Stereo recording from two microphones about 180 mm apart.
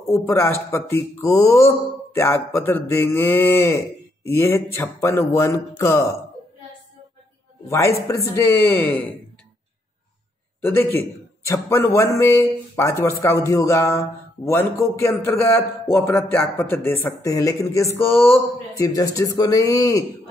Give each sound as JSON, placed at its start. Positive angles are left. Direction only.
{"t": 0.1, "sound": "speech", "side_deg": 15}
{"t": 7.6, "sound": "speech", "side_deg": 15}
{"t": 10.6, "sound": "speech", "side_deg": 10}